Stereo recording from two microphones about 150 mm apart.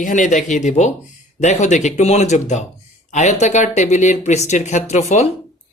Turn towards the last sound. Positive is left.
turn(degrees=50)  # may be behind; listen again after turning